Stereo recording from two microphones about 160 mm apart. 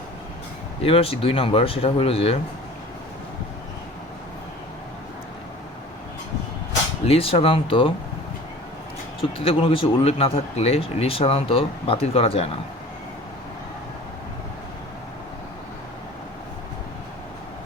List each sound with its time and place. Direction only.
0.8 s speech: 35° left (ahead or behind)
7.0 s speech: 35° left (ahead or behind)
9.4 s speech: 35° left (ahead or behind)